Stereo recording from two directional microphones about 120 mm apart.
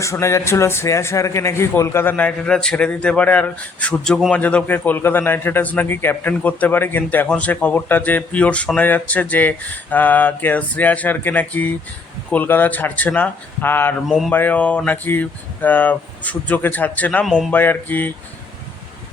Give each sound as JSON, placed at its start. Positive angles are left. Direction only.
{"t": 0.0, "sound": "speech", "side_deg": 25}
{"t": 17.2, "sound": "speech", "side_deg": 0}
{"t": 17.5, "sound": "speech", "side_deg": 15}